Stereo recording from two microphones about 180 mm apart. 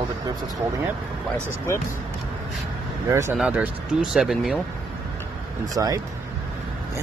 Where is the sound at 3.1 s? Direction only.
15° right (ahead or behind).